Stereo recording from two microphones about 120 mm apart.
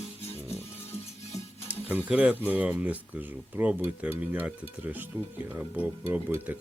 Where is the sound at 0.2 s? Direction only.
60° left (ahead or behind).